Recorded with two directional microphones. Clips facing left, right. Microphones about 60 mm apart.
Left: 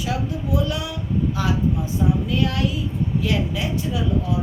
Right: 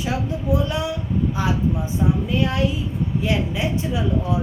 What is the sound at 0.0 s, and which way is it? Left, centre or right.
Speech, right.